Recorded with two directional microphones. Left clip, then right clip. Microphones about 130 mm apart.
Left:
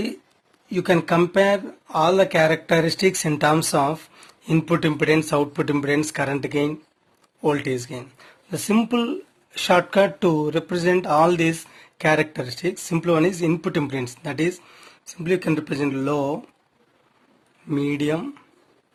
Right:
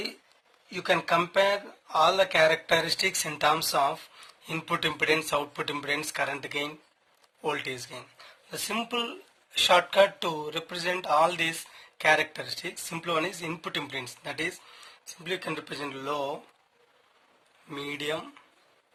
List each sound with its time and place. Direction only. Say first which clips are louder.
0.7 s speech: left 5 dB; 30° left (ahead or behind)
17.7 s speech: left 9 dB; 40° left (ahead or behind)